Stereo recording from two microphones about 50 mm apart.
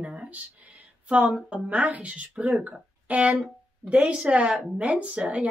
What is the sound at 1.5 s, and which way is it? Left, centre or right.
Speech, right.